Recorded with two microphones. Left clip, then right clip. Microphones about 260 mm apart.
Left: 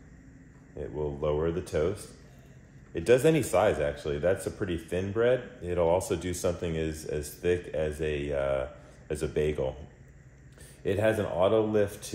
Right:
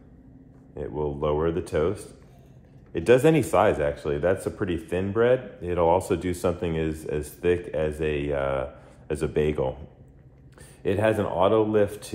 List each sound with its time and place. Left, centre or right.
1.0 s speech: centre
2.9 s speech: centre
10.8 s speech: centre